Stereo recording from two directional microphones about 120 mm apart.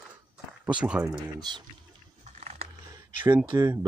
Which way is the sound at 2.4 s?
65° right (ahead or behind).